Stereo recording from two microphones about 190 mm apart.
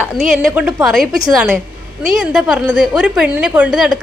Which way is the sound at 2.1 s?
Centre (ahead or behind).